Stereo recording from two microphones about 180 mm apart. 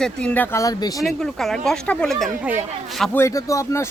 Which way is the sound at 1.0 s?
Centre (ahead or behind).